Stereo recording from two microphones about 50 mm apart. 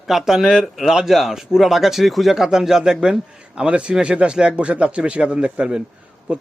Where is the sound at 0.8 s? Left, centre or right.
Centre.